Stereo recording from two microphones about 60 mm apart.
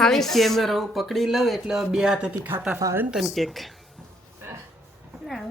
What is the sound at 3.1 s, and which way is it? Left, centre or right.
Speech, centre.